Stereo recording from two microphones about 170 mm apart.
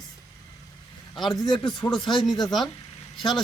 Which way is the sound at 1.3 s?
25° left (ahead or behind).